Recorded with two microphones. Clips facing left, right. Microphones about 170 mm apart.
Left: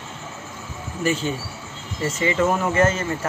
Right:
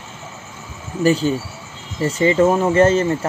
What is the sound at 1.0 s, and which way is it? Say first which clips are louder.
Speech: right 7 dB; 35° right (ahead or behind).